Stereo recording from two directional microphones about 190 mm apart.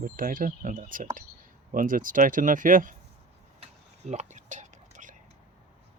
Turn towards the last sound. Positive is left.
turn(degrees=-40)  # may be behind; listen again after turning